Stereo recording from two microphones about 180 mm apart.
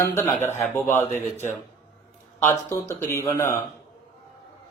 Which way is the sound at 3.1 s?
15° left (ahead or behind).